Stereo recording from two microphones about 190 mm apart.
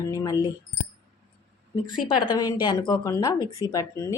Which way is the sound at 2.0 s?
25° left (ahead or behind).